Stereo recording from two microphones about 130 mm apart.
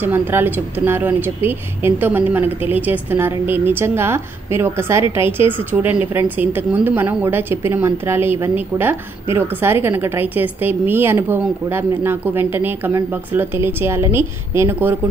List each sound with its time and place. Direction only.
0.0 s a woman's voice: 15° right (ahead or behind)